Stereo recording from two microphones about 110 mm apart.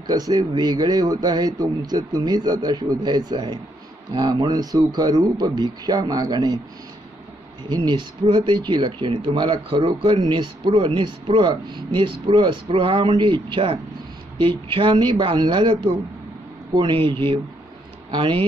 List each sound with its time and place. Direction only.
0.0 s a man's voice: 35° right (ahead or behind)
7.7 s speech: 45° right (ahead or behind)
13.0 s speech: 45° right (ahead or behind)